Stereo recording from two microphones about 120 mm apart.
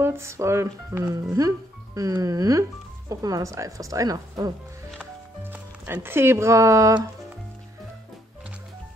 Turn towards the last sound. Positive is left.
turn(degrees=-30)  # may be behind; listen again after turning